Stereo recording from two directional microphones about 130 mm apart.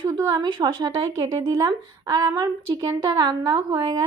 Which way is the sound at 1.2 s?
45° right (ahead or behind).